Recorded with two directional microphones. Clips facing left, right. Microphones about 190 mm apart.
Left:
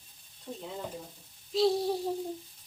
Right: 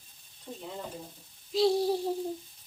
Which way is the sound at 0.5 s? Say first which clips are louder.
Left 1 dB; 5° left (ahead or behind).